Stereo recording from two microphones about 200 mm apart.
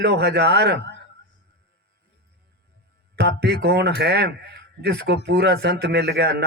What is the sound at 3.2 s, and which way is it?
A man's voice, 55° right (ahead or behind).